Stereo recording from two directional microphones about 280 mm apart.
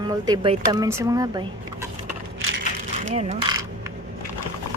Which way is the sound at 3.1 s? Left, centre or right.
Right.